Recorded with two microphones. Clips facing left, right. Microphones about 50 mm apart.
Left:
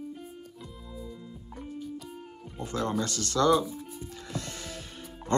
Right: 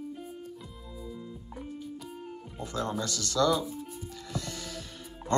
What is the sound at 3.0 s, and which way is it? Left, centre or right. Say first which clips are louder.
Music: left 1 dB; left.